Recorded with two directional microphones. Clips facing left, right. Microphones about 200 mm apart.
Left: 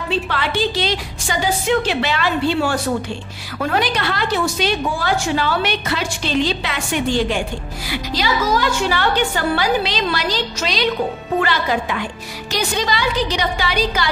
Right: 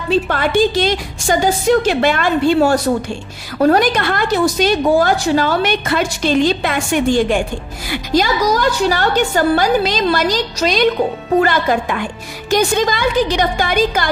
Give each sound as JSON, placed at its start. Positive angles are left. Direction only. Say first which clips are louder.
{"t": 0.1, "sound": "a woman's voice", "louder": "right 7 dB", "side_deg": -45}